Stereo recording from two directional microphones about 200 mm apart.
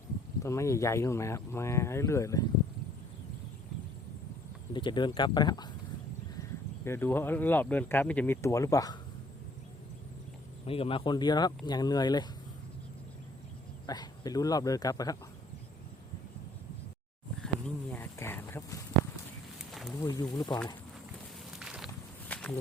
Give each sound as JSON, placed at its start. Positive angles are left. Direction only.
{"t": 0.4, "sound": "speech", "side_deg": 15}
{"t": 4.7, "sound": "speech", "side_deg": 25}
{"t": 6.8, "sound": "speech", "side_deg": 10}
{"t": 10.7, "sound": "speech", "side_deg": 30}
{"t": 13.8, "sound": "speech", "side_deg": 20}
{"t": 17.4, "sound": "a sound", "side_deg": 10}
{"t": 20.0, "sound": "speech", "side_deg": 15}
{"t": 21.6, "sound": "a sound", "side_deg": -5}
{"t": 22.3, "sound": "walk", "side_deg": 5}